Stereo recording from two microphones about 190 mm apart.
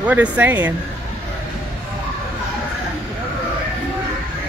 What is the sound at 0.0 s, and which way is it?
Speech, 10° right (ahead or behind).